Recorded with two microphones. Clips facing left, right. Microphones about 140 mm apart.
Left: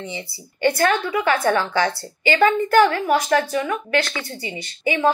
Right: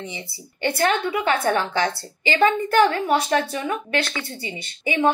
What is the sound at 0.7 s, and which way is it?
A woman's voice, 25° right (ahead or behind).